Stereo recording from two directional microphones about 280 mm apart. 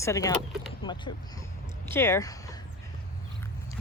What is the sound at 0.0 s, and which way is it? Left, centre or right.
Speech, centre.